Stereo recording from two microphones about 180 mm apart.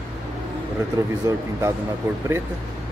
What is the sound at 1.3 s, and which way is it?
Speech, 15° right (ahead or behind).